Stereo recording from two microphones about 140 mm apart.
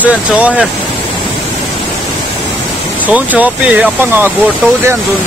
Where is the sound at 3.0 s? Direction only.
10° right (ahead or behind).